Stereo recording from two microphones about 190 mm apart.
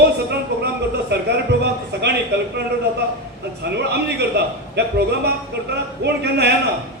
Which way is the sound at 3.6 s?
60° right (ahead or behind).